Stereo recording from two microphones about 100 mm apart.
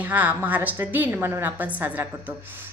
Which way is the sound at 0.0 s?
15° right (ahead or behind).